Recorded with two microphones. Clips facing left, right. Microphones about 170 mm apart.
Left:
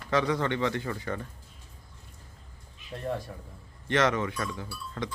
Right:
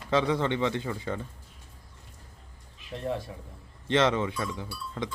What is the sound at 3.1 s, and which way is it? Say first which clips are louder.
Speech: right 1 dB; centre (ahead or behind).